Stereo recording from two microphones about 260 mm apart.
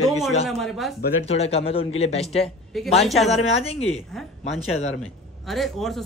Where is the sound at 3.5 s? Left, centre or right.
Left.